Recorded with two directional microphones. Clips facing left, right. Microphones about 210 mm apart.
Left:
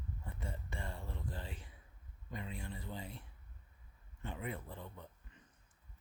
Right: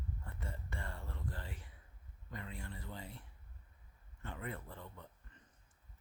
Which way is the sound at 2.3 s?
20° left (ahead or behind).